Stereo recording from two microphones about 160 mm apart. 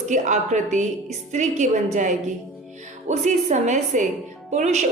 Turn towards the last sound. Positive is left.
turn(degrees=-45)  # may be behind; listen again after turning